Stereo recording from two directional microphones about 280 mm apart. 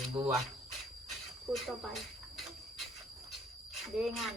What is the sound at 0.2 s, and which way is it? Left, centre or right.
Speech, centre.